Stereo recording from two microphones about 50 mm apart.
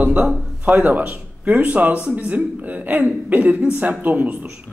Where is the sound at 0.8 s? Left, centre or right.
Right.